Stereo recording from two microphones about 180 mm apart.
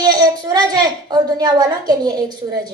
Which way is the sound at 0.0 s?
20° right (ahead or behind).